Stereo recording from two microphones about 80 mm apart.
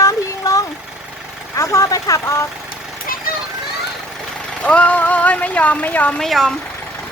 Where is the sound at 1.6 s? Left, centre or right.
Left.